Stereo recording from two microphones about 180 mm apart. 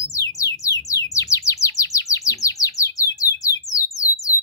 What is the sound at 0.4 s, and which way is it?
Bird, 20° left (ahead or behind).